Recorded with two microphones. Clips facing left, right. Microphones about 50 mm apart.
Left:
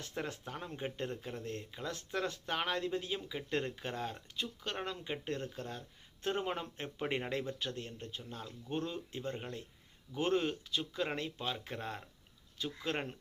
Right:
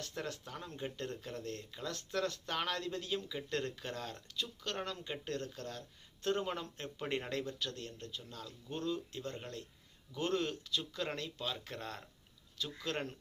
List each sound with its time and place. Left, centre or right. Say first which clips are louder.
0.0 s a man's voice: left 2 dB; centre